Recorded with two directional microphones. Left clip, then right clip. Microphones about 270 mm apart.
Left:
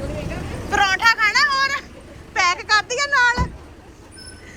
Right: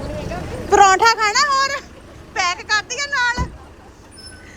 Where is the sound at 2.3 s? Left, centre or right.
Centre.